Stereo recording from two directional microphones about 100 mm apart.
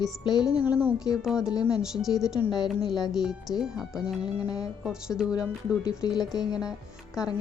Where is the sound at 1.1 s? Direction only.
5° right (ahead or behind).